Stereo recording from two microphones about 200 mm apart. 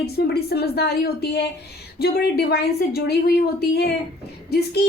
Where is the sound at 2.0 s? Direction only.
50° left (ahead or behind).